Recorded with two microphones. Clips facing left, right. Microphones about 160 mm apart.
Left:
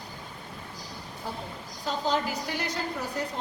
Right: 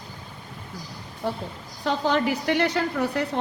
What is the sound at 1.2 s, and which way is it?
A woman's voice, 70° right (ahead or behind).